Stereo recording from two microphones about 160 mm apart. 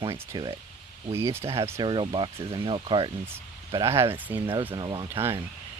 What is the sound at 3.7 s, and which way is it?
Speech, 20° right (ahead or behind).